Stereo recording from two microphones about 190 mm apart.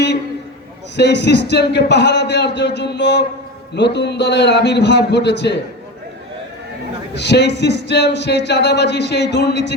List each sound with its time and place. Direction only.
0.9 s speech: 65° left (ahead or behind)
7.1 s speech: 65° left (ahead or behind)